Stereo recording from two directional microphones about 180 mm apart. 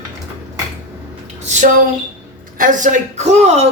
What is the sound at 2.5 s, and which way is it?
Speech, 45° right (ahead or behind).